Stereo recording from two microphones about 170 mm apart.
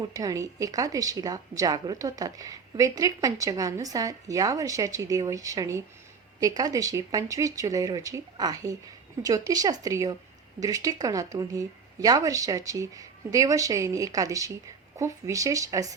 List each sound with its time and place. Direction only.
0.1 s speech: 20° right (ahead or behind)